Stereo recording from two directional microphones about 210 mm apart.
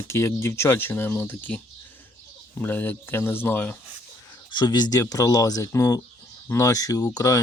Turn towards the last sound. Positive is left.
turn(degrees=15)  # may be behind; listen again after turning